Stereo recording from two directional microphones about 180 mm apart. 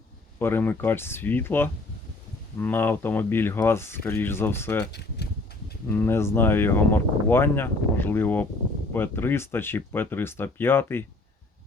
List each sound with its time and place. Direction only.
0.3 s speech: 10° left (ahead or behind)
4.9 s a sound: 65° left (ahead or behind)
5.9 s speech: 10° left (ahead or behind)